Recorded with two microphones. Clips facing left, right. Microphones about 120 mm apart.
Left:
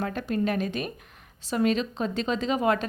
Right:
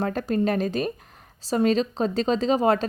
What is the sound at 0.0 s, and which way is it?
A woman's voice, 40° right (ahead or behind).